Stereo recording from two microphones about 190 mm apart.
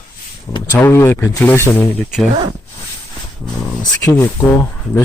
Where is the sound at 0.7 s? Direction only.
10° left (ahead or behind).